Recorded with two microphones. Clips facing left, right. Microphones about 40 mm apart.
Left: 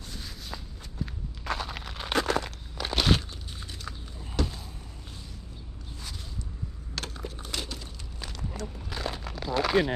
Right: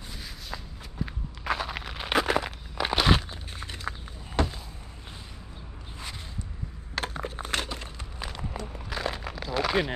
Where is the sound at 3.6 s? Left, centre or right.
Right.